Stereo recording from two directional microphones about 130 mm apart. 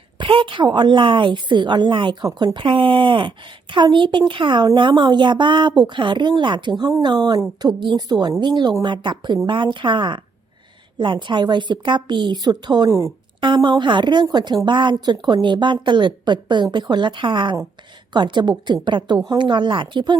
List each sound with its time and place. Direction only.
0.2 s speech: 40° right (ahead or behind); by 13.1 s 25° right (ahead or behind)
13.4 s speech: 35° right (ahead or behind)